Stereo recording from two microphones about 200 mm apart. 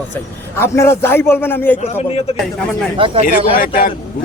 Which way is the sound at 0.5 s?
10° left (ahead or behind).